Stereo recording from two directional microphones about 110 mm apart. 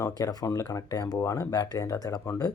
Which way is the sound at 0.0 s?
35° left (ahead or behind).